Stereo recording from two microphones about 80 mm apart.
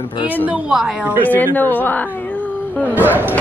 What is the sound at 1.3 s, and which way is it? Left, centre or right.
Speech, left.